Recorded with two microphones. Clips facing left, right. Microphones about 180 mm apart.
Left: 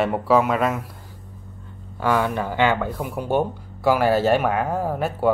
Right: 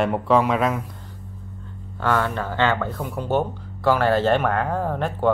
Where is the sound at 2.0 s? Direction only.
10° left (ahead or behind).